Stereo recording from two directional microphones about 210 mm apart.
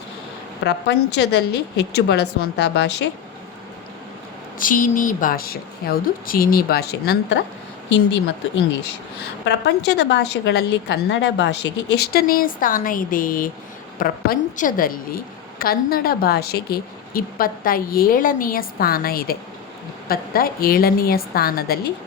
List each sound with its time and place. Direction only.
0.6 s a woman's voice: 55° left (ahead or behind)
4.6 s a woman's voice: 40° left (ahead or behind)
9.2 s a woman's voice: 55° left (ahead or behind)